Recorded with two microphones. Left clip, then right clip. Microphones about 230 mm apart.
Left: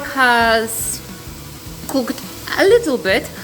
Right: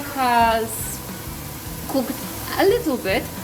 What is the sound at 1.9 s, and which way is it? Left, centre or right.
Speech, left.